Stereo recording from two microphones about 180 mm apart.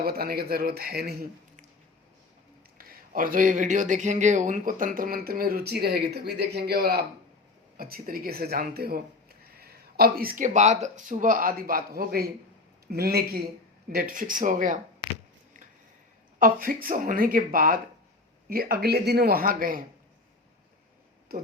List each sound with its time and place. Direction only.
0.0 s speech: 55° right (ahead or behind)
2.7 s speech: 50° right (ahead or behind)
16.4 s speech: 50° right (ahead or behind)